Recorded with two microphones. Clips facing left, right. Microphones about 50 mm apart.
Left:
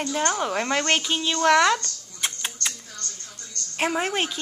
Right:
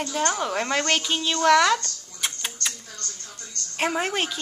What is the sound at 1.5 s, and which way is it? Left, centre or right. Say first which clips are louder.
Speech: right 1 dB; left.